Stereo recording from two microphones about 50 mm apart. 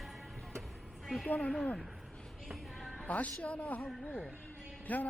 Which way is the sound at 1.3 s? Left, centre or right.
Left.